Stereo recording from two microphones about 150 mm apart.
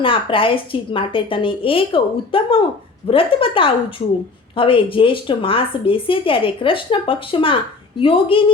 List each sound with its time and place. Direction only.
0.0 s speech: 35° left (ahead or behind)